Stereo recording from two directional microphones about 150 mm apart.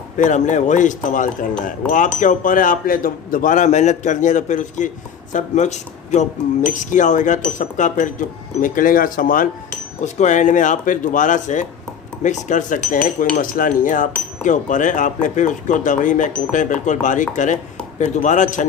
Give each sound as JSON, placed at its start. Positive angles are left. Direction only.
{"t": 0.2, "sound": "speech", "side_deg": 55}
{"t": 10.0, "sound": "speech", "side_deg": 50}